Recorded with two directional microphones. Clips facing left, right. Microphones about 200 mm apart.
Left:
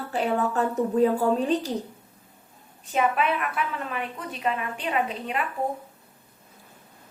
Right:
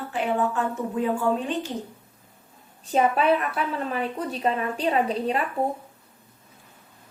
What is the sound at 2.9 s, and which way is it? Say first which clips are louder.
A woman's voice: right 4 dB; 35° right (ahead or behind).